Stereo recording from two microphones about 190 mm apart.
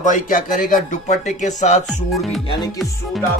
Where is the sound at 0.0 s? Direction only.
45° left (ahead or behind).